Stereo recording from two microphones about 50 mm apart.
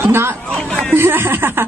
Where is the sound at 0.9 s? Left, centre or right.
Right.